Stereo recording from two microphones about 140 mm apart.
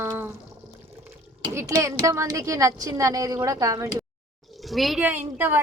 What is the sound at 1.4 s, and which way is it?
A woman's voice, 20° right (ahead or behind).